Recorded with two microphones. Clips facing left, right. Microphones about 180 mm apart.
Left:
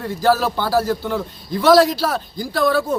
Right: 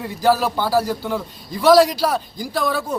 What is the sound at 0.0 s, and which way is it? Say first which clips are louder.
A man's voice: even; 10° right (ahead or behind).